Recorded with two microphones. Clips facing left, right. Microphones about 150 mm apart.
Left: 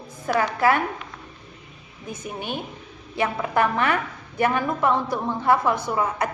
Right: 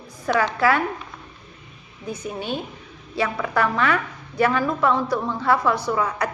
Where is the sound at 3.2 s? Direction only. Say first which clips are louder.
Even; 25° left (ahead or behind).